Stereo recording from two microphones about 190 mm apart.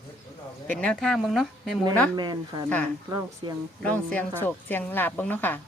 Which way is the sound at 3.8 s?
10° left (ahead or behind).